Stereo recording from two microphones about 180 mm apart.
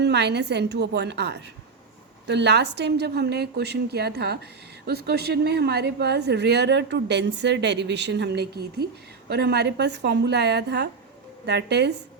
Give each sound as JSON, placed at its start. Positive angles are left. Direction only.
{"t": 0.0, "sound": "a woman's voice", "side_deg": -70}